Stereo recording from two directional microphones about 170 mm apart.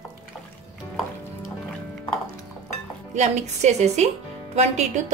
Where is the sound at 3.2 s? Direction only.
45° right (ahead or behind).